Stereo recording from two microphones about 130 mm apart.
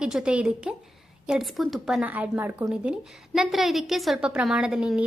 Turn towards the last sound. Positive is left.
turn(degrees=-5)  # may be behind; listen again after turning